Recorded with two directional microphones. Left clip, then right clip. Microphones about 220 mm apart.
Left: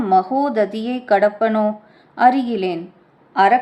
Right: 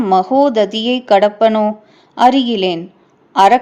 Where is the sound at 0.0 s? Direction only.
30° right (ahead or behind).